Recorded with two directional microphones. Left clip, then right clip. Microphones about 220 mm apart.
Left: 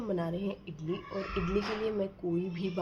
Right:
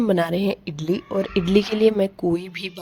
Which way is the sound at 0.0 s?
45° right (ahead or behind).